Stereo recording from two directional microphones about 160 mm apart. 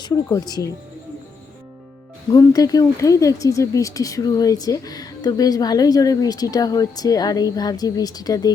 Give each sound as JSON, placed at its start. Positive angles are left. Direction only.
{"t": 0.0, "sound": "speech", "side_deg": 20}
{"t": 2.3, "sound": "speech", "side_deg": 25}